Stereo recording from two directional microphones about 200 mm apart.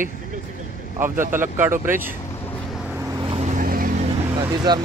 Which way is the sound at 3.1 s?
30° right (ahead or behind).